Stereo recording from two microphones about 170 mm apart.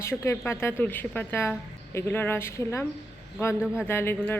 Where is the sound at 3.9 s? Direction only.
15° left (ahead or behind).